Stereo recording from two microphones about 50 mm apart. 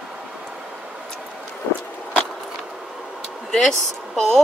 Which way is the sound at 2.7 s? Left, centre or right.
Centre.